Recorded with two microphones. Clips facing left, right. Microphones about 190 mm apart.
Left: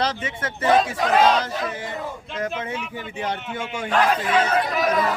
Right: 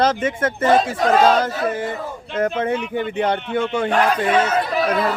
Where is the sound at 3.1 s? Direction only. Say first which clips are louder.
Right 5 dB; 60° right (ahead or behind).